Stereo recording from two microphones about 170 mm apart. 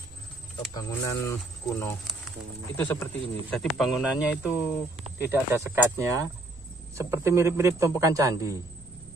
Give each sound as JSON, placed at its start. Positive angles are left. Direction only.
{"t": 0.7, "sound": "speech", "side_deg": 20}
{"t": 3.6, "sound": "a man's voice", "side_deg": 0}